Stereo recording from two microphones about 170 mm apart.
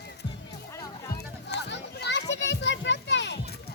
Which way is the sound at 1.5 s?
85° left.